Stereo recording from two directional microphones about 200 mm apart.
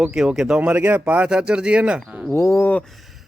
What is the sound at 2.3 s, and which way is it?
Speech, 10° left (ahead or behind).